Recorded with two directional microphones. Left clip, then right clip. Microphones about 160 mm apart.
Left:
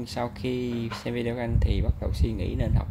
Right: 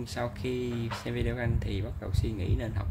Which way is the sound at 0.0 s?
20° left (ahead or behind).